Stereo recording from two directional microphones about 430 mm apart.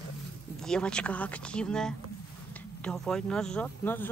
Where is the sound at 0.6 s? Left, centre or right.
Centre.